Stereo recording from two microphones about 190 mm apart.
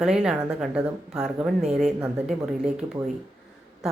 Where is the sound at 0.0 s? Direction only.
5° right (ahead or behind).